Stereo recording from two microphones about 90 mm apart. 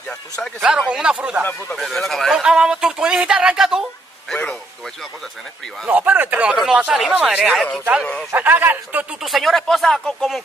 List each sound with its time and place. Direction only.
0.6 s speech: 10° right (ahead or behind)
1.4 s speech: 20° left (ahead or behind)
1.8 s speech: centre (ahead or behind)
2.4 s speech: 10° right (ahead or behind)
5.9 s speech: 20° right (ahead or behind)
6.5 s speech: 10° right (ahead or behind)
8.0 s speech: 15° left (ahead or behind)
8.3 s speech: 20° right (ahead or behind)
9.2 s speech: centre (ahead or behind)